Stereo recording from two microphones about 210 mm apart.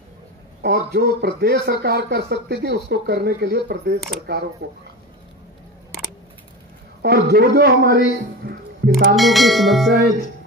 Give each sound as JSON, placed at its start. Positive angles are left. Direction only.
{"t": 0.6, "sound": "speech", "side_deg": -50}
{"t": 7.0, "sound": "a man's voice", "side_deg": -50}
{"t": 9.1, "sound": "bell", "side_deg": 0}